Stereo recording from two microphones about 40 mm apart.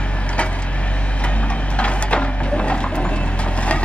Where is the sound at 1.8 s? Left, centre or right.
Left.